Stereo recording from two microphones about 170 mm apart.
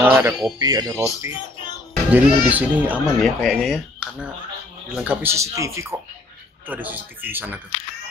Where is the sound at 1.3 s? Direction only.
25° left (ahead or behind).